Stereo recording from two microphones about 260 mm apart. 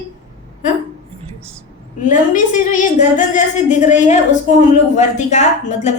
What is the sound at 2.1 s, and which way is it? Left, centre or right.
A woman's voice, left.